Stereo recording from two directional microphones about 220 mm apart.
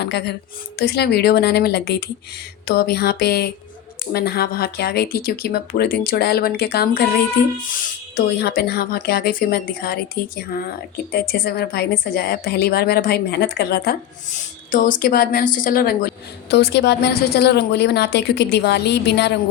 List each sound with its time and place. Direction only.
0.0 s a woman's voice: 50° left (ahead or behind)